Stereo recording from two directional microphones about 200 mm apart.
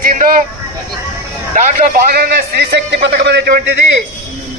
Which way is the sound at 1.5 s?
50° right (ahead or behind).